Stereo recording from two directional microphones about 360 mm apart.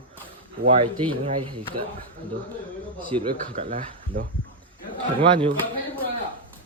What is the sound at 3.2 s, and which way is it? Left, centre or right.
Speech, centre.